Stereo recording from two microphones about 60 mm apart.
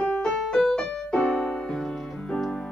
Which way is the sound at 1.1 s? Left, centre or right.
Centre.